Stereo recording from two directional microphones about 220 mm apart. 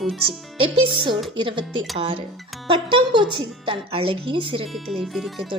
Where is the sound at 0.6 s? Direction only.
25° right (ahead or behind).